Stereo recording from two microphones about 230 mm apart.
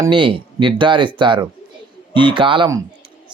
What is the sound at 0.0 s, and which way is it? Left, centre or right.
A man's voice, right.